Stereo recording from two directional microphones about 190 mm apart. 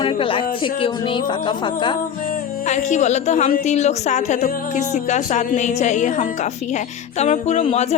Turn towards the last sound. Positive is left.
turn(degrees=35)  # may be behind; listen again after turning